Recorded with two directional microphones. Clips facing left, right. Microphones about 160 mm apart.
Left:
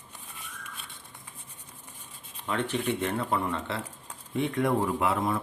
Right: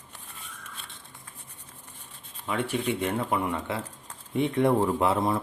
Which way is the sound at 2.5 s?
10° right (ahead or behind).